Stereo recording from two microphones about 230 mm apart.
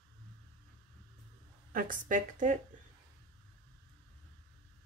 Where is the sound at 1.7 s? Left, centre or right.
Right.